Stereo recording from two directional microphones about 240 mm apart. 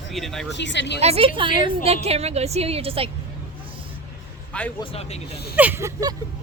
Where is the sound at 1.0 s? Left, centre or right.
Right.